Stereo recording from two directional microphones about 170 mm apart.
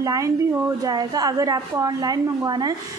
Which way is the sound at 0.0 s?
20° right (ahead or behind).